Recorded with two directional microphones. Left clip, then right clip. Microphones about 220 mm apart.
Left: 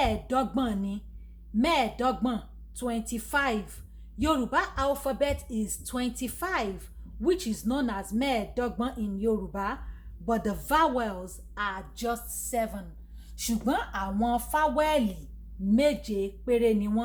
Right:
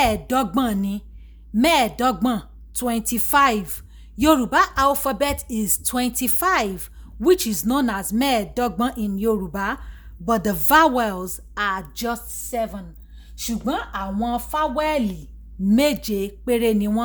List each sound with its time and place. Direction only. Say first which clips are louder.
0.0 s a woman's voice: right 7 dB; 50° right (ahead or behind)
15.7 s a woman's voice: right 5 dB; 55° right (ahead or behind)